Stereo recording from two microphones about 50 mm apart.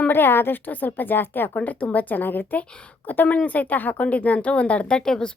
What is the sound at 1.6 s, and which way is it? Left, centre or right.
Speech, left.